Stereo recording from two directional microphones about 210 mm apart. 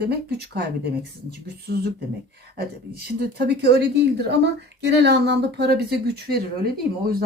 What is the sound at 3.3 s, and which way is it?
A woman's voice, 50° right (ahead or behind).